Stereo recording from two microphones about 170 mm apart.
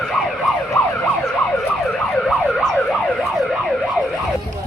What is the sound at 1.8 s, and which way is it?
Emergency vehicle, centre (ahead or behind).